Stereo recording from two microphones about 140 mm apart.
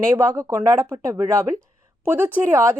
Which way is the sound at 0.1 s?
25° right (ahead or behind).